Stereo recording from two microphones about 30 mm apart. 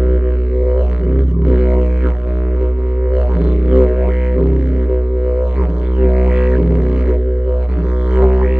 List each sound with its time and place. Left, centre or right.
0.7 s music: right
3.3 s music: right
5.9 s music: right